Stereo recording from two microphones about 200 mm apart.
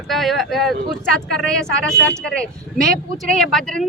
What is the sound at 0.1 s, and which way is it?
Speech, centre (ahead or behind).